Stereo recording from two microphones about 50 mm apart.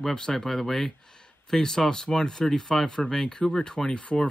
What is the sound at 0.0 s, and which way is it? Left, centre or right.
Speech, centre.